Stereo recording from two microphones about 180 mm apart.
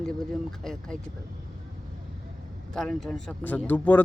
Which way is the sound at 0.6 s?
Centre (ahead or behind).